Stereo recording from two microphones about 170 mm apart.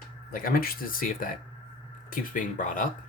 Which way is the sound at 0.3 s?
55° left (ahead or behind).